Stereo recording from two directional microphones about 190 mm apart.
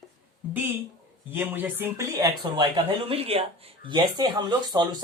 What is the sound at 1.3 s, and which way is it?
A woman's voice, 10° right (ahead or behind).